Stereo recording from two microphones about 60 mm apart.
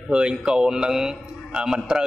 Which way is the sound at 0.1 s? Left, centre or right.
Centre.